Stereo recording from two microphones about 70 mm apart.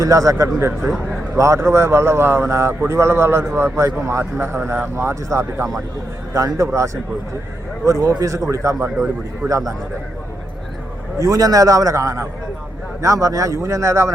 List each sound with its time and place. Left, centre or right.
0.0 s a man's voice: right
11.2 s a man's voice: right